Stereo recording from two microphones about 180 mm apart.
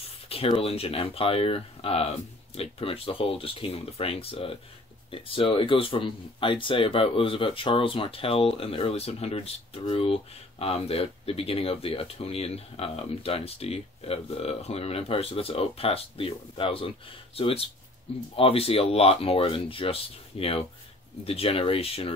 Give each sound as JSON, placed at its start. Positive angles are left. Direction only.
{"t": 0.3, "sound": "speech", "side_deg": 30}
{"t": 18.3, "sound": "speech", "side_deg": 30}